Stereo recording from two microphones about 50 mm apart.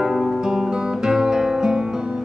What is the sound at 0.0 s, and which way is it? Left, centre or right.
Music, centre.